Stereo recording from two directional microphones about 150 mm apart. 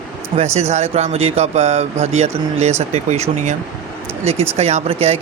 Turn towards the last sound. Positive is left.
turn(degrees=-45)  # may be behind; listen again after turning